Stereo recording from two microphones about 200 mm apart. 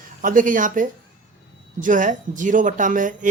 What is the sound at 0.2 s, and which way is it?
Speech, 40° right (ahead or behind).